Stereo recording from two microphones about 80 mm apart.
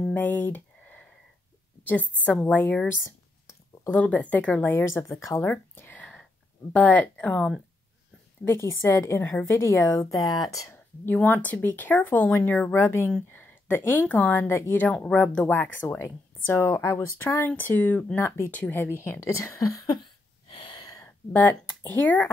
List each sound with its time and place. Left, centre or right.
0.0 s a sound: centre
1.9 s speech: centre
3.1 s a sound: left
3.9 s speech: centre
5.0 s a woman's voice: left
5.4 s speech: left
8.5 s a woman's voice: left
9.4 s speech: left
9.8 s speech: left
11.1 s a woman's voice: left
20.0 s a sound: left
20.7 s a sound: left
21.3 s speech: left